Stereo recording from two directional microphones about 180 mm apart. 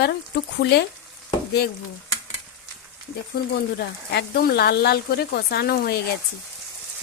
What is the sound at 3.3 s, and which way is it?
Speech, 65° left (ahead or behind).